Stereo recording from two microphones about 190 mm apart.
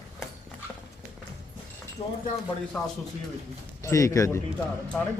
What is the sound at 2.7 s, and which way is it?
Speech, 5° left (ahead or behind).